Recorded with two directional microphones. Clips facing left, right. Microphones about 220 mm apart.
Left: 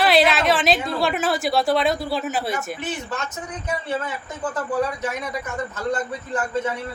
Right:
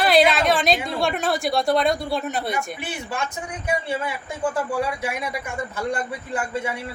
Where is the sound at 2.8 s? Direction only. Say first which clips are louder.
Left 1 dB; 10° right (ahead or behind).